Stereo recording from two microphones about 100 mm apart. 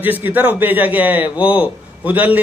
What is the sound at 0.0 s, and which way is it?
A man's voice, 20° right (ahead or behind).